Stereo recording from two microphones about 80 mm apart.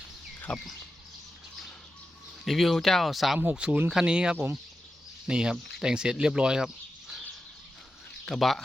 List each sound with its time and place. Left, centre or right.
0.5 s bird: centre
2.4 s speech: centre
3.3 s speech: centre
8.2 s speech: centre